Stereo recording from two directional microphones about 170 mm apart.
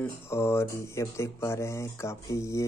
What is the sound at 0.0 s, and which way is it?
Speech, 15° left (ahead or behind).